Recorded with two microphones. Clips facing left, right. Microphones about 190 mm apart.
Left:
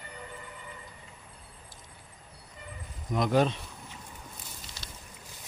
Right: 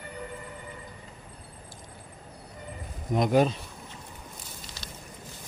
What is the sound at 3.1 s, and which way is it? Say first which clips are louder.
Speech: right 3 dB; 20° right (ahead or behind).